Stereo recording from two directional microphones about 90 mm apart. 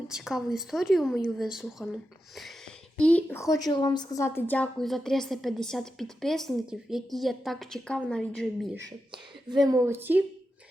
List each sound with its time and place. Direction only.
0.1 s a woman's voice: 5° right (ahead or behind)
3.0 s a woman's voice: 15° left (ahead or behind)
3.3 s a woman's voice: 35° left (ahead or behind)
3.8 s a woman's voice: 50° left (ahead or behind)
4.2 s a woman's voice: 25° left (ahead or behind)
4.8 s a woman's voice: 5° left (ahead or behind)
9.1 s speech: 55° right (ahead or behind)
9.8 s speech: 25° right (ahead or behind)